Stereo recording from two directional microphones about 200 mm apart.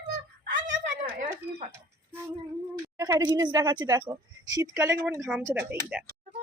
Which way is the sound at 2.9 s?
15° right (ahead or behind).